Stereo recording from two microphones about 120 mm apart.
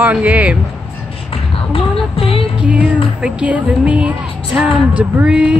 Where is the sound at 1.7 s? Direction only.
50° left (ahead or behind).